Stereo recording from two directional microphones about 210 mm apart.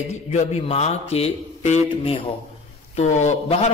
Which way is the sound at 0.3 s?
30° left (ahead or behind).